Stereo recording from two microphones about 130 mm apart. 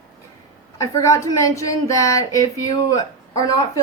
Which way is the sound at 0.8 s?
25° left (ahead or behind).